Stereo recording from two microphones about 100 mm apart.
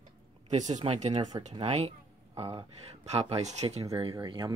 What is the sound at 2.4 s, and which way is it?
Speech, 80° right.